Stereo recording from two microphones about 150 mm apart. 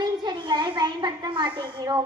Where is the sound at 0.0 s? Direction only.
30° right (ahead or behind).